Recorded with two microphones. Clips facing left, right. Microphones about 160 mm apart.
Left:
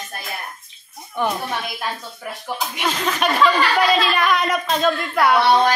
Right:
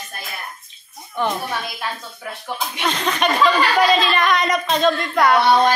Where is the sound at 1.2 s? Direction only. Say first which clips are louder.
Even; 15° left (ahead or behind).